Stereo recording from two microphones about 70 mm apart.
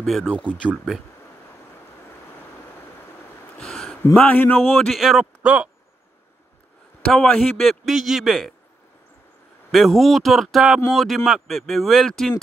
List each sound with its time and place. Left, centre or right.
0.0 s speech: centre
3.5 s a sound: centre
4.1 s speech: left
4.6 s speech: centre
5.4 s speech: right
7.1 s a man's voice: centre
7.5 s speech: centre
9.7 s a man's voice: centre